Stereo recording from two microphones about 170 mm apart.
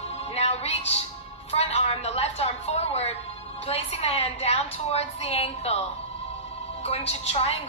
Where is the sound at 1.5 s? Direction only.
40° left (ahead or behind).